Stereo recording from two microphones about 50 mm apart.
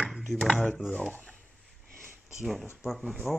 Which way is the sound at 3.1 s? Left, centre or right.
Centre.